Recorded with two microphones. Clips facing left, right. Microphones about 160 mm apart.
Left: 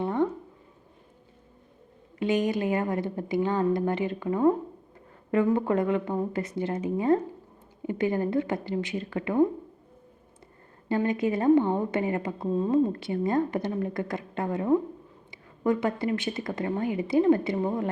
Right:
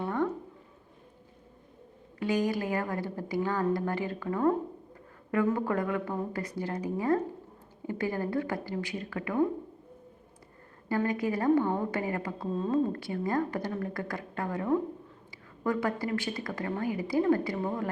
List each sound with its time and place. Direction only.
0.0 s a sound: 20° left (ahead or behind)
2.1 s a woman's voice: 20° left (ahead or behind)
10.8 s a woman's voice: 20° left (ahead or behind)